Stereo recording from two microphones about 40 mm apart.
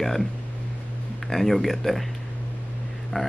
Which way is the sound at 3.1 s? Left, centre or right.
Centre.